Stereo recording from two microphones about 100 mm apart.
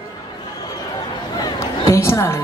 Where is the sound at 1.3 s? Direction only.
40° left (ahead or behind).